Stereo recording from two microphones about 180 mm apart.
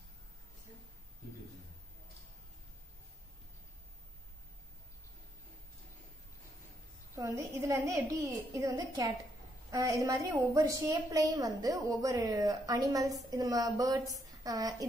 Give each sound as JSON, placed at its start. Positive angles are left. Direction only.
{"t": 7.2, "sound": "a woman's voice", "side_deg": -20}